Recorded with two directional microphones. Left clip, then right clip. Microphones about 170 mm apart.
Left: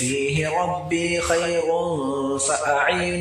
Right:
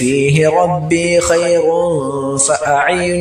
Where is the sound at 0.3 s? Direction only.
50° right (ahead or behind).